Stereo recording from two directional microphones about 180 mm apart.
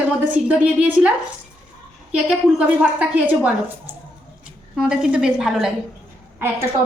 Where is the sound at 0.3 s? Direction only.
5° right (ahead or behind).